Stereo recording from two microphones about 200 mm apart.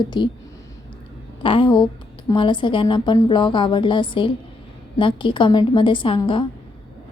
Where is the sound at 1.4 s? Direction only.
25° left (ahead or behind).